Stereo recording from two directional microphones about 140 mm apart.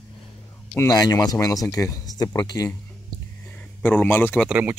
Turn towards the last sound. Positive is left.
turn(degrees=-10)  # may be behind; listen again after turning